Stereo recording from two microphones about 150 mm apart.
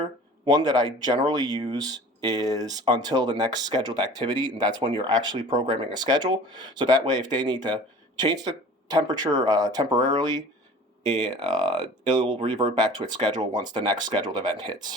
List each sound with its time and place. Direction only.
0.0 s speech: 25° right (ahead or behind)